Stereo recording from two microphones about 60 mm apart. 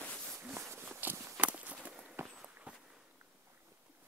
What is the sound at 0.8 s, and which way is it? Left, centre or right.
Walk, right.